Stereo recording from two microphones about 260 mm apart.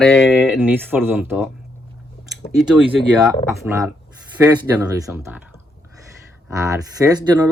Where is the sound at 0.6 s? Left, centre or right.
Centre.